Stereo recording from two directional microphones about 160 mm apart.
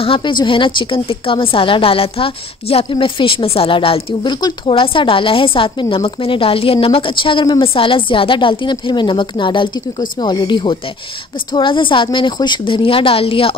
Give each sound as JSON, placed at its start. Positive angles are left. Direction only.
{"t": 0.0, "sound": "a woman's voice", "side_deg": 30}